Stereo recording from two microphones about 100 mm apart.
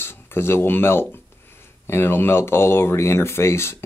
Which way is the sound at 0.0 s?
25° left (ahead or behind).